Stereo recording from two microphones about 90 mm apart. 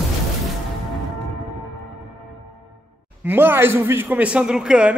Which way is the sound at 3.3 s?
25° right (ahead or behind).